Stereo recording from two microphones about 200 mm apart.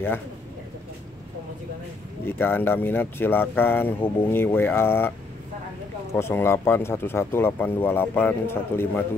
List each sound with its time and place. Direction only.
2.2 s speech: 10° left (ahead or behind)
6.1 s speech: 10° left (ahead or behind)